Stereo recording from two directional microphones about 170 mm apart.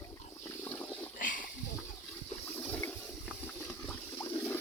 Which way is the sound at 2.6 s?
10° left (ahead or behind).